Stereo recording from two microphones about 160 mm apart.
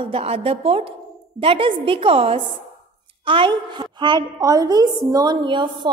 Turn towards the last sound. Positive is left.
turn(degrees=-30)  # may be behind; listen again after turning